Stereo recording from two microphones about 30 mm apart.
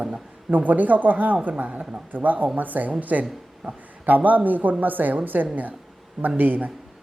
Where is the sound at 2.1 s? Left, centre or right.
Right.